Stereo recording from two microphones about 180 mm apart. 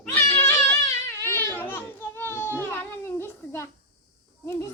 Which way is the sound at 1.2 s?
10° left (ahead or behind).